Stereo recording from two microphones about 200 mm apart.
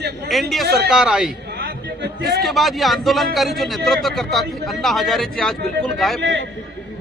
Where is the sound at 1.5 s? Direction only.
55° right (ahead or behind).